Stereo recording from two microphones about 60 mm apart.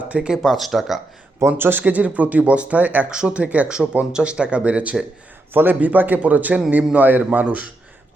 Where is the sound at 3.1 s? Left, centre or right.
Centre.